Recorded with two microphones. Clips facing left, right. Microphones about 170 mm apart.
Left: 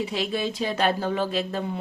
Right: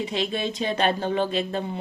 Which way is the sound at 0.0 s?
5° left (ahead or behind).